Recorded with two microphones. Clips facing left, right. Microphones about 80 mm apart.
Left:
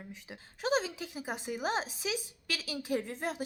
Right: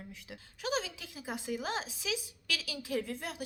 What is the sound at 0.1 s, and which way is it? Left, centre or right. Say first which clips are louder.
A woman's voice: left 1 dB; left.